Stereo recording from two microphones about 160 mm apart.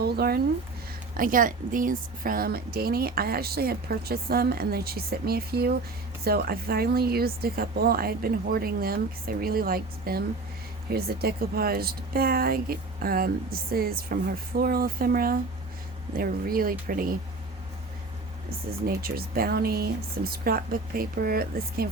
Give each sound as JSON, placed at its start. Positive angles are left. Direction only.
{"t": 0.0, "sound": "speech", "side_deg": -80}
{"t": 1.1, "sound": "a woman's voice", "side_deg": -60}
{"t": 18.9, "sound": "a woman's voice", "side_deg": -70}